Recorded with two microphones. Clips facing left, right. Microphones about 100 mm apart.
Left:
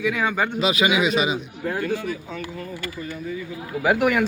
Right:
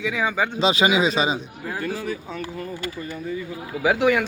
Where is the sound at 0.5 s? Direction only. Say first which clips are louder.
Right 4 dB; 30° right (ahead or behind).